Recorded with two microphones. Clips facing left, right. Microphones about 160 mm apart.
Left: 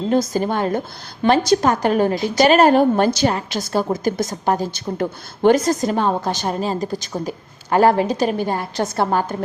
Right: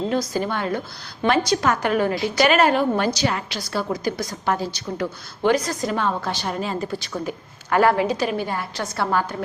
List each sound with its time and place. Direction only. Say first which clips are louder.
0.1 s a woman's voice: left 5 dB; 45° left (ahead or behind)